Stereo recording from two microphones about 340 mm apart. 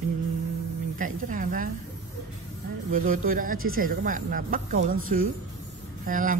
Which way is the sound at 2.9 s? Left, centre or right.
Right.